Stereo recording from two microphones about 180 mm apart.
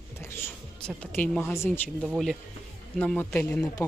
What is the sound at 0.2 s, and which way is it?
Speech, 10° left (ahead or behind).